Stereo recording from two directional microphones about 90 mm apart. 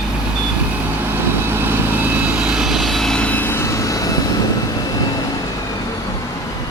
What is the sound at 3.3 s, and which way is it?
Vehicle, 20° left (ahead or behind).